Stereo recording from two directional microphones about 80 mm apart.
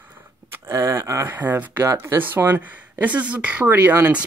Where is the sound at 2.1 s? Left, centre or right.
Right.